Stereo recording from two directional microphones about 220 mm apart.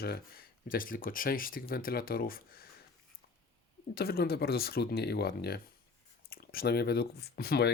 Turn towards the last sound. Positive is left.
turn(degrees=45)  # may be behind; listen again after turning